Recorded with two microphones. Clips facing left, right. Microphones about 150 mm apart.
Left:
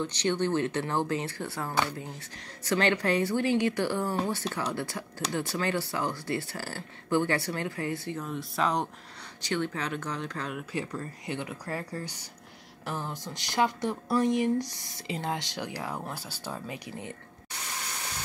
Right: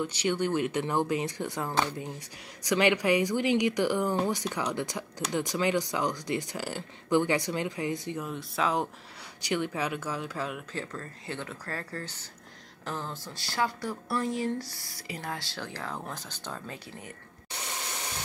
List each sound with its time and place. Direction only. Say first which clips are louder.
0.0 s speech: even; 10° right (ahead or behind)
8.3 s speech: left 1 dB; centre (ahead or behind)
9.4 s speech: right 1 dB; 10° right (ahead or behind)
10.7 s speech: left 3 dB; 15° left (ahead or behind)